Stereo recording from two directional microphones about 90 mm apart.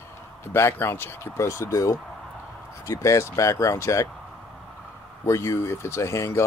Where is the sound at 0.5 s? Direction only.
25° left (ahead or behind).